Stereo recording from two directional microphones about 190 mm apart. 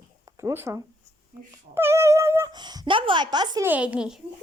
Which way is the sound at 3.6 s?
5° right (ahead or behind).